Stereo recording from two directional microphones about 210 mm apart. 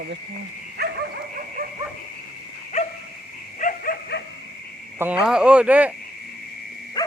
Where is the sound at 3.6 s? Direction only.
45° left (ahead or behind).